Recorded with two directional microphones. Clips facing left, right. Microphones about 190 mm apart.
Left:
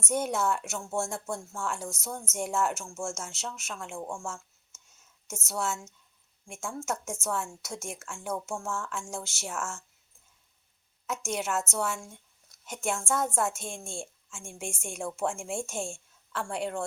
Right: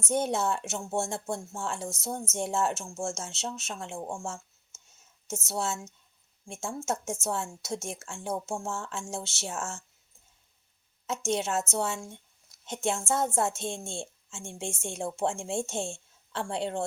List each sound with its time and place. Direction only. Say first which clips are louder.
0.1 s a woman's voice: right 1 dB; 25° right (ahead or behind)
5.5 s a woman's voice: even; 25° right (ahead or behind)
11.0 s a woman's voice: right 3 dB; 25° right (ahead or behind)